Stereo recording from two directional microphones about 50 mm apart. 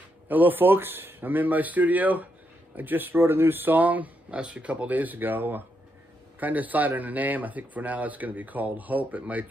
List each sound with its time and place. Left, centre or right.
0.3 s speech: right